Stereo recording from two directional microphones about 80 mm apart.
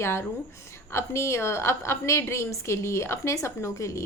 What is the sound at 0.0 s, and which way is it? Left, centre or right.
A woman's voice, left.